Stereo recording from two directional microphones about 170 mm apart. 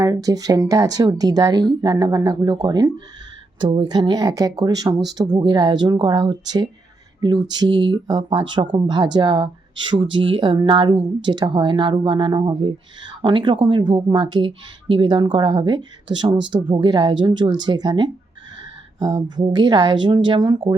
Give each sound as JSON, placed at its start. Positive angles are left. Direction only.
{"t": 0.0, "sound": "speech", "side_deg": -20}
{"t": 7.2, "sound": "a sound", "side_deg": -25}
{"t": 7.5, "sound": "speech", "side_deg": -25}